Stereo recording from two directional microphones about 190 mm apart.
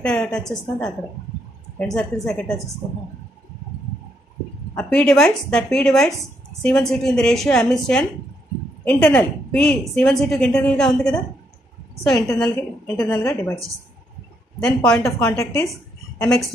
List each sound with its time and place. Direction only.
0.0 s a woman's voice: 5° left (ahead or behind)
4.7 s a woman's voice: 5° left (ahead or behind)
12.1 s a woman's voice: 15° left (ahead or behind)
14.6 s a woman's voice: 5° left (ahead or behind)